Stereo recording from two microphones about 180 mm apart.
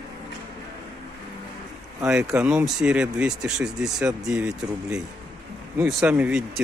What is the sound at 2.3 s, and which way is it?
Speech, 5° right (ahead or behind).